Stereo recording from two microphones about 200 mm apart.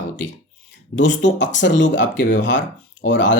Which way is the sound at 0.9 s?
65° left (ahead or behind).